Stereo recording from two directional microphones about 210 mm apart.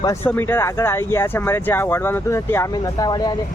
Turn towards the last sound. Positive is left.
turn(degrees=20)  # may be behind; listen again after turning